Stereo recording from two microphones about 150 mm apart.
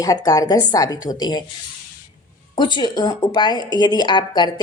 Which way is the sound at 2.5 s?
30° left (ahead or behind).